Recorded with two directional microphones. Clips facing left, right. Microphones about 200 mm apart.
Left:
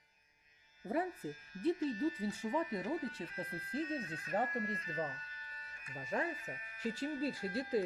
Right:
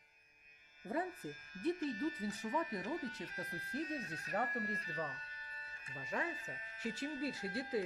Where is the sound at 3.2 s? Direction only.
25° left (ahead or behind).